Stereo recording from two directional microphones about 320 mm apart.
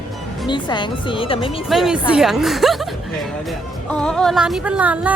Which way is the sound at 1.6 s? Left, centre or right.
Centre.